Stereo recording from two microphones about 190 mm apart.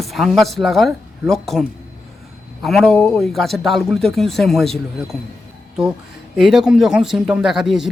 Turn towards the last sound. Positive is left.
turn(degrees=0)  # may be behind; listen again after turning